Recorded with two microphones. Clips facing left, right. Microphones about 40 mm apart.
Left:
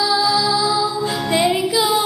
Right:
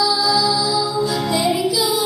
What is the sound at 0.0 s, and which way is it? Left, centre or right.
Music, left.